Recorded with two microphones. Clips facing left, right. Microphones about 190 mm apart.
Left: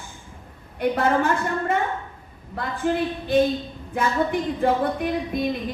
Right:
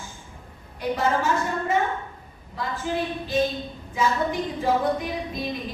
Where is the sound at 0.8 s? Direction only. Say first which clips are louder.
Left 3 dB; 60° left (ahead or behind).